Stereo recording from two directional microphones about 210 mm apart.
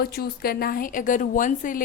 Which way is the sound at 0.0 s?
45° left (ahead or behind).